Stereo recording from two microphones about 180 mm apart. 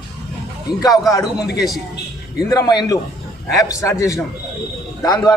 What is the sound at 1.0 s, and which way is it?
Speech, 20° left (ahead or behind).